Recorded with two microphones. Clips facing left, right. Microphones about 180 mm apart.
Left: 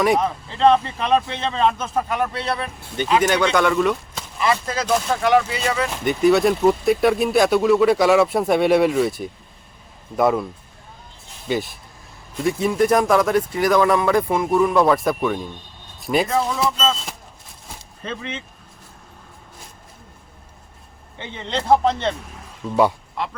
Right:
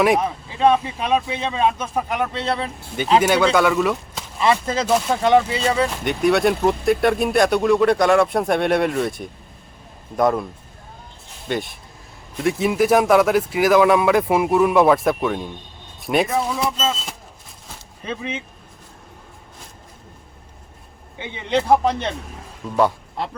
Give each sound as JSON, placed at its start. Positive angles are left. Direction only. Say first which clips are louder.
{"t": 0.0, "sound": "speech", "louder": "right 1 dB", "side_deg": -5}
{"t": 3.2, "sound": "speech", "louder": "right 2 dB", "side_deg": -5}
{"t": 4.4, "sound": "speech", "louder": "right 2 dB", "side_deg": -25}
{"t": 6.1, "sound": "speech", "louder": "left 3 dB", "side_deg": 0}
{"t": 11.4, "sound": "speech", "louder": "left 1 dB", "side_deg": 0}
{"t": 18.0, "sound": "speech", "louder": "right 2 dB", "side_deg": -10}
{"t": 21.2, "sound": "speech", "louder": "right 5 dB", "side_deg": -15}